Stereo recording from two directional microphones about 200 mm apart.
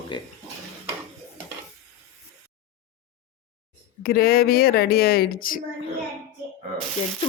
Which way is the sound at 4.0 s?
50° left (ahead or behind).